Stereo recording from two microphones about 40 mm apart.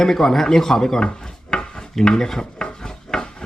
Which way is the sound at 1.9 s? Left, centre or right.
Centre.